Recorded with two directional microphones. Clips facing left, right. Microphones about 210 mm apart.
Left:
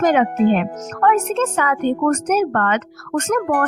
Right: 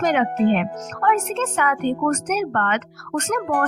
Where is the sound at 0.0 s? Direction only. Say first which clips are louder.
Left 3 dB; 40° left (ahead or behind).